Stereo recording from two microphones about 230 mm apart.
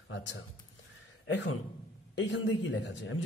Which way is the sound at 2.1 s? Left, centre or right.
Left.